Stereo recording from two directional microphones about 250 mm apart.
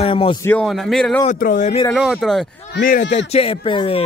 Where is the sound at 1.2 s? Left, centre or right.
Left.